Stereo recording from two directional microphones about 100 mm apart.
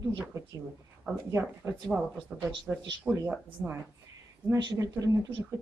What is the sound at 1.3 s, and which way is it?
Speech, 25° right (ahead or behind).